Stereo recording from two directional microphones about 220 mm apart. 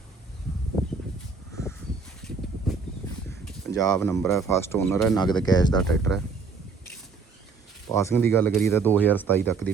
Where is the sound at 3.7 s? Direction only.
15° left (ahead or behind).